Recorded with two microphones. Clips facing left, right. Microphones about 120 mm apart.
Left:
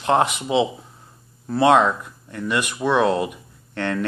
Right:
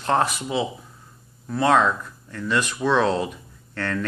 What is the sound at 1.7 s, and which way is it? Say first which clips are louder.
Speech: left 2 dB; 15° left (ahead or behind).